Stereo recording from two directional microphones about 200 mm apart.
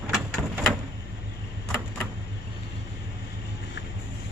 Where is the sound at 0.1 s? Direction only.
Centre (ahead or behind).